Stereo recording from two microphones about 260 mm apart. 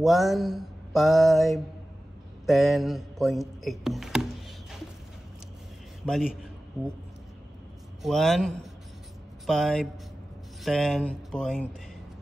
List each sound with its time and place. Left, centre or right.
0.0 s mantra: centre
2.4 s speech: centre
8.0 s mantra: centre